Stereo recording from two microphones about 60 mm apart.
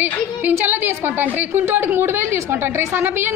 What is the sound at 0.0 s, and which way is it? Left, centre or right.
A woman's voice, right.